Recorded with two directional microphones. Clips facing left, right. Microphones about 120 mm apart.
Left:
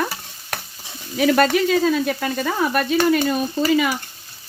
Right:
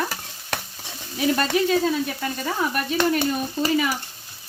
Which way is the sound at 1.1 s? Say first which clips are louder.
Left 5 dB; 80° left.